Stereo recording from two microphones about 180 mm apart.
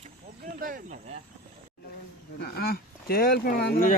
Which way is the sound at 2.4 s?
60° left (ahead or behind).